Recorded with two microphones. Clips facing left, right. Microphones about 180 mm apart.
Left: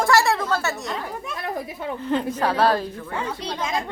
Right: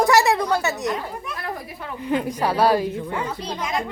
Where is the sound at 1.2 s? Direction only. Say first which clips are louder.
Left 2 dB; 25° left (ahead or behind).